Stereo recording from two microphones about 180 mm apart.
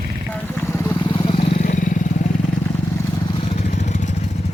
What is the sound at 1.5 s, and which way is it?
Vehicle, 45° left (ahead or behind).